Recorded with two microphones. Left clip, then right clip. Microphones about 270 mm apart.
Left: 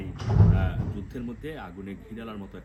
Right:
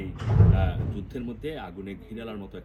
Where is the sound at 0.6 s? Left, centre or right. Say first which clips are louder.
Right 2 dB; centre.